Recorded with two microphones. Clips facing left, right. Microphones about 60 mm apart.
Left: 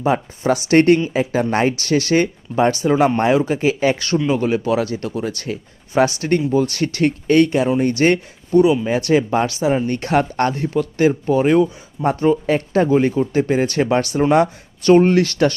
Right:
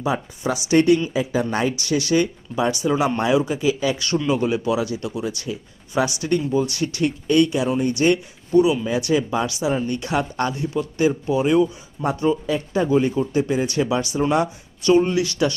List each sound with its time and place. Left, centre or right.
0.0 s speech: left
4.3 s speech: left
8.5 s speech: left
8.9 s speech: left
12.5 s speech: left
12.9 s speech: left